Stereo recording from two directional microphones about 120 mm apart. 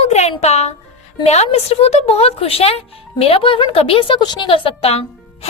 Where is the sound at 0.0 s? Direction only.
65° left (ahead or behind).